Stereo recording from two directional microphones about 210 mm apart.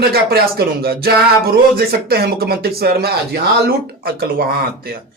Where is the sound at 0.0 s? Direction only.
45° right (ahead or behind).